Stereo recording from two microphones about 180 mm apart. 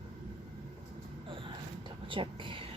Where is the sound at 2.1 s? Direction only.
30° right (ahead or behind).